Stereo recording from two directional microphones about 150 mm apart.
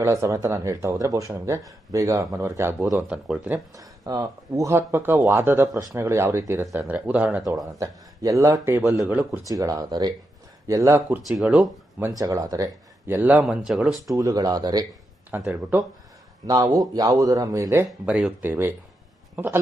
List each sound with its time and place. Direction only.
0.0 s speech: 20° right (ahead or behind)
2.8 s speech: 5° right (ahead or behind)
3.8 s speech: 25° right (ahead or behind)
7.8 s speech: 20° right (ahead or behind)
9.5 s speech: 25° right (ahead or behind)
11.3 s speech: 5° right (ahead or behind)
14.1 s speech: 20° right (ahead or behind)
15.3 s speech: 15° right (ahead or behind)
16.5 s speech: 25° right (ahead or behind)